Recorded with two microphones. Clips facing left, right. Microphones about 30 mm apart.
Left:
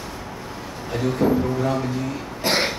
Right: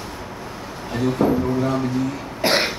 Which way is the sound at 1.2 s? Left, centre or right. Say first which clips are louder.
Right 1 dB; left.